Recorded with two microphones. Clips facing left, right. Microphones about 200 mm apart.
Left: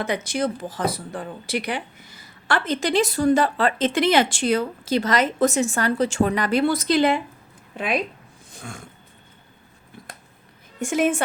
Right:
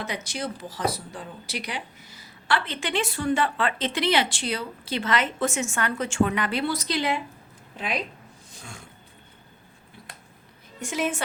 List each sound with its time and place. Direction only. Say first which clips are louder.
0.0 s speech: left 8 dB; 55° left (ahead or behind)
8.5 s roaring cats: left 7 dB; 55° left (ahead or behind)
10.8 s a woman's voice: left 7 dB; 50° left (ahead or behind)